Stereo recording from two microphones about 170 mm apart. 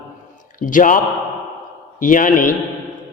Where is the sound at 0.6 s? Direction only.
50° left (ahead or behind).